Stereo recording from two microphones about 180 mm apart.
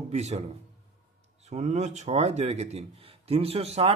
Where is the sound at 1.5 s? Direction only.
40° right (ahead or behind).